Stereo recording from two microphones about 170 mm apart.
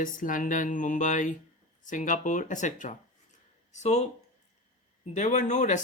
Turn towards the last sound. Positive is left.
turn(degrees=45)  # may be behind; listen again after turning